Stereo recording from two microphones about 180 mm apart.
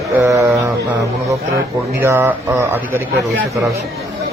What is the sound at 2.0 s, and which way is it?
Speech, 10° right (ahead or behind).